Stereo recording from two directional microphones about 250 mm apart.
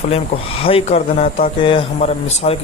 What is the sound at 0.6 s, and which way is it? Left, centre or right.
Speech, left.